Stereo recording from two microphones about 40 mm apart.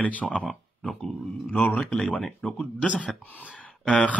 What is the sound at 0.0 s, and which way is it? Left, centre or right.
Speech, left.